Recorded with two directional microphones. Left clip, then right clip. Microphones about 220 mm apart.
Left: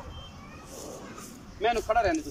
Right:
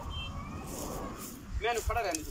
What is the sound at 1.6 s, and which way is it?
Speech, 40° left (ahead or behind).